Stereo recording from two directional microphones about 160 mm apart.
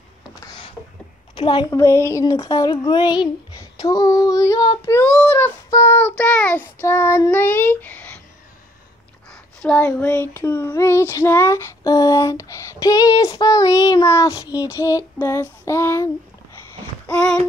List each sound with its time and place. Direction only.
0.4 s a sound: 25° left (ahead or behind)
1.3 s a woman's voice: 30° left (ahead or behind)
1.7 s child singing: 15° left (ahead or behind)
9.3 s a sound: 5° left (ahead or behind)
9.8 s child singing: 10° left (ahead or behind)
17.1 s child singing: 5° left (ahead or behind)